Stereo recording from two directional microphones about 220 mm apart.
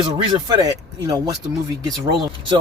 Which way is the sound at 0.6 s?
15° right (ahead or behind).